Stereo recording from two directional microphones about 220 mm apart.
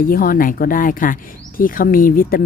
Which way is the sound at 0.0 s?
40° left (ahead or behind).